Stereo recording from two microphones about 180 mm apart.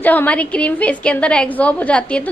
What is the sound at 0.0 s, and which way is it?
A woman's voice, 10° left (ahead or behind).